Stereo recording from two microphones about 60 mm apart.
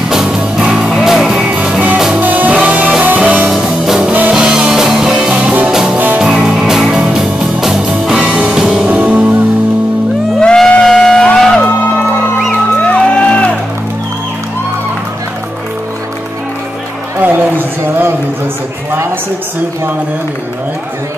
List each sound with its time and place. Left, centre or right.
0.1 s music: centre
2.1 s music: right
3.6 s music: centre
5.7 s music: centre
5.9 s music: right
6.2 s music: centre
8.8 s music: right
10.4 s a sound: centre
10.9 s vehicle: centre
12.8 s music: left
17.2 s music: right